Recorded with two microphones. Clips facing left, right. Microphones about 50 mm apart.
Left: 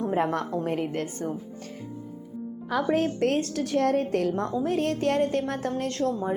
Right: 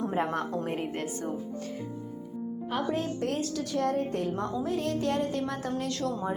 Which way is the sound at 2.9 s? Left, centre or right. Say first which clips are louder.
Left 6 dB; left.